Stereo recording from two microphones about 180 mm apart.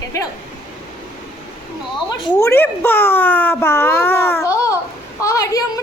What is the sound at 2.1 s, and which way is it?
Speech, 25° left (ahead or behind).